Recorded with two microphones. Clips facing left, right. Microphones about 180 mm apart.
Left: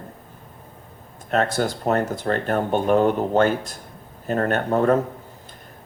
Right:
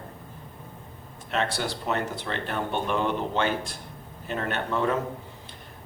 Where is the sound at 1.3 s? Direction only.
45° left (ahead or behind).